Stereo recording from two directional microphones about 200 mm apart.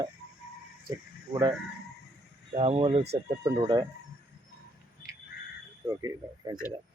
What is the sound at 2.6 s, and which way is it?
Speech, 30° right (ahead or behind).